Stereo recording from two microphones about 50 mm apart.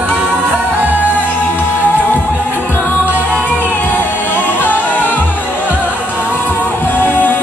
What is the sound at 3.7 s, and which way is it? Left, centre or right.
Music, left.